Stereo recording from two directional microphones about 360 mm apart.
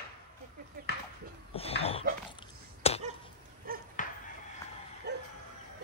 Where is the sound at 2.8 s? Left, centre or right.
Centre.